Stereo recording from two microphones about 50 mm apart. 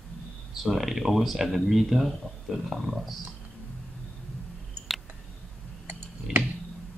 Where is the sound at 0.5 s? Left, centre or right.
Centre.